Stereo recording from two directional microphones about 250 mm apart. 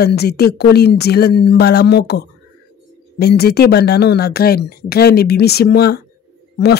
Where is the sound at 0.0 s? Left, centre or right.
Left.